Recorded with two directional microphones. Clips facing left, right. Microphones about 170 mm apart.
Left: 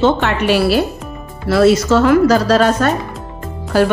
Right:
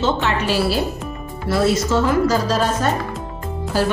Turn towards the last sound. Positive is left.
turn(degrees=65)  # may be behind; listen again after turning